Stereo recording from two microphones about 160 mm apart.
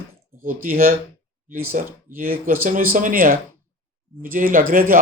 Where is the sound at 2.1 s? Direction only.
60° right (ahead or behind).